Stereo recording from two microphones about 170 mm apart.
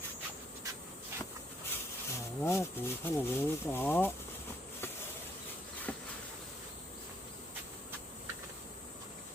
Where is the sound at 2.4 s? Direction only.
15° left (ahead or behind).